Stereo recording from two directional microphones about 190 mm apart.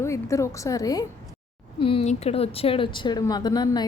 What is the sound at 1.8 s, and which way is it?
Speech, 30° left (ahead or behind).